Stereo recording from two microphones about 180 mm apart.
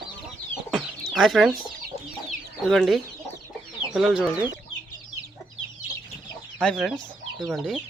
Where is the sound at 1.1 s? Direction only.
Centre (ahead or behind).